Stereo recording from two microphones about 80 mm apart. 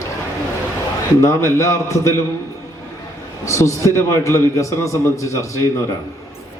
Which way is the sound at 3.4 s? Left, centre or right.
Left.